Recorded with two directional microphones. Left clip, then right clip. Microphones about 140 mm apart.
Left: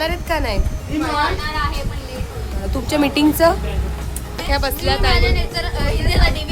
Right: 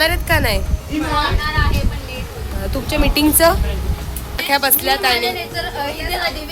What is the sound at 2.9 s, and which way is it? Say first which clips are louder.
Speech: left 2 dB; 30° left (ahead or behind).